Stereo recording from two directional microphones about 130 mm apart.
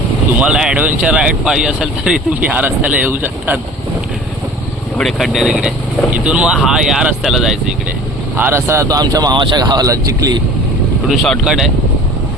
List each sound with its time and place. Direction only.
0.3 s speech: 5° right (ahead or behind)
4.9 s speech: centre (ahead or behind)
8.4 s speech: 20° right (ahead or behind)
11.1 s speech: centre (ahead or behind)